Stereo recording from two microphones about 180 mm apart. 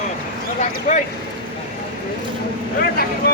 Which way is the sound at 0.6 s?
45° left (ahead or behind).